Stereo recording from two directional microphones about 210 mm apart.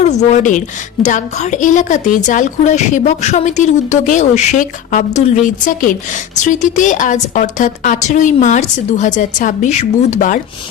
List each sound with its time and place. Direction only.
0.0 s a woman's voice: 35° left (ahead or behind)